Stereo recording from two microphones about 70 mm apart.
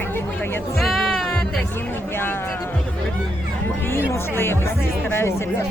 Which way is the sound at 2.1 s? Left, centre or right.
Left.